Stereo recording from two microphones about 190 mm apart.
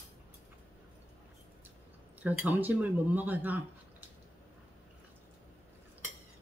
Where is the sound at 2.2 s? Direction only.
10° right (ahead or behind).